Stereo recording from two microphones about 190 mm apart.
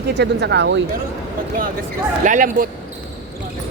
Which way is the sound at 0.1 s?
65° right (ahead or behind).